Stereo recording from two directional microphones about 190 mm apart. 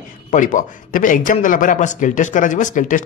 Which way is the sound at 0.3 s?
45° left (ahead or behind).